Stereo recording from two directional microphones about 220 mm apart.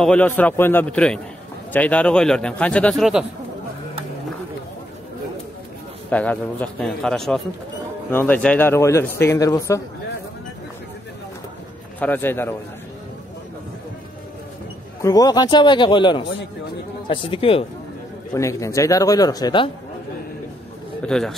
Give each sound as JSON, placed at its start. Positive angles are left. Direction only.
{"t": 0.0, "sound": "a man's voice", "side_deg": 5}
{"t": 6.0, "sound": "a man's voice", "side_deg": 5}
{"t": 12.0, "sound": "speech", "side_deg": 10}
{"t": 15.0, "sound": "a man's voice", "side_deg": 15}
{"t": 18.3, "sound": "speech", "side_deg": 15}
{"t": 21.0, "sound": "a man's voice", "side_deg": 5}